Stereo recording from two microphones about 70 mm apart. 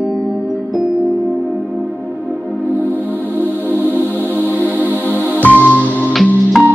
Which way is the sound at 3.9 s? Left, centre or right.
Right.